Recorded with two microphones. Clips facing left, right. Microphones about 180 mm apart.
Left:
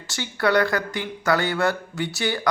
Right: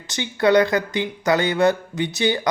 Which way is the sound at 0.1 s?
20° right (ahead or behind).